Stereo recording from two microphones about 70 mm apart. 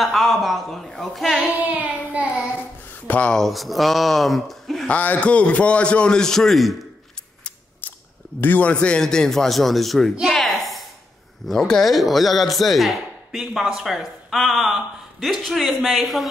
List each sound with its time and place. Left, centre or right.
0.0 s speech: centre
1.6 s child singing: right
3.1 s speech: centre
3.3 s speech: centre
4.8 s a man's voice: left; by 6.7 s centre
7.8 s chewing: left
8.4 s a man's voice: left; by 10.1 s centre
10.2 s a sound: centre
11.4 s speech: centre